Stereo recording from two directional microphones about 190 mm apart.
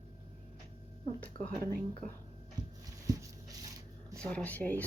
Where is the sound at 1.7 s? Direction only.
50° right (ahead or behind).